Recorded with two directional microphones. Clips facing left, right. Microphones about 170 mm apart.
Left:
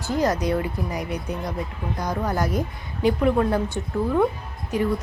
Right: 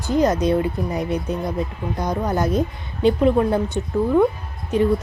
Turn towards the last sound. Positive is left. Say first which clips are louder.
# right 5 dB
turn(degrees=-25)  # may be behind; listen again after turning